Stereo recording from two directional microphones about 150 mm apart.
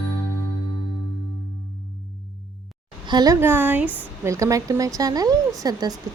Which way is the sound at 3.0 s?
25° right (ahead or behind).